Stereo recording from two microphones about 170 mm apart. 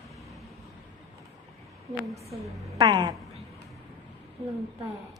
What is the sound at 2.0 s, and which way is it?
Speech, centre (ahead or behind).